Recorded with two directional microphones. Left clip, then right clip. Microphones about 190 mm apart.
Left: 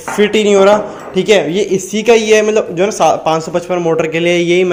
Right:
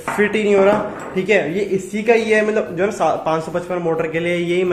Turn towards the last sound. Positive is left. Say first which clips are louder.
# left 7 dB
turn(degrees=40)  # may be behind; listen again after turning